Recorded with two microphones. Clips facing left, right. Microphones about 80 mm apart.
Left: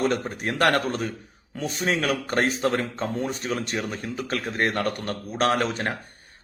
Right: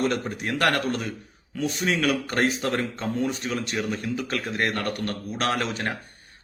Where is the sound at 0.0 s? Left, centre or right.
Left.